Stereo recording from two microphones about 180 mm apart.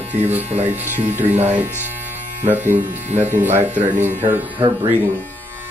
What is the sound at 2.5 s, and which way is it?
Speech, 10° right (ahead or behind).